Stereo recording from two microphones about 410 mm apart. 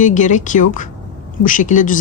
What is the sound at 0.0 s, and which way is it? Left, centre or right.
Speech, centre.